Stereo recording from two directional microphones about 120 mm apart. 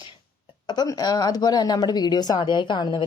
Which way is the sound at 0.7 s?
35° left (ahead or behind).